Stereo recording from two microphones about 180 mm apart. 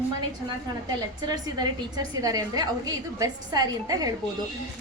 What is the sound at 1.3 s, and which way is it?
A woman's voice, 20° right (ahead or behind).